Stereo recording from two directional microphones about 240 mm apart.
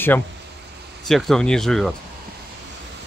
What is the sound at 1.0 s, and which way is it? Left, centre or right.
Speech, centre.